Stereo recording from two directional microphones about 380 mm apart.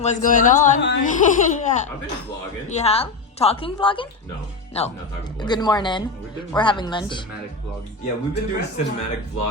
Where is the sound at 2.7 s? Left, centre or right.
Centre.